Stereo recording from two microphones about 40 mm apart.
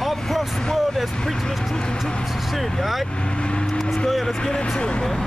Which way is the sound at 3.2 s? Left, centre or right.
Left.